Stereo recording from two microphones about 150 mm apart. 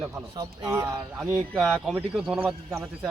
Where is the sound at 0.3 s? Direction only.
20° right (ahead or behind).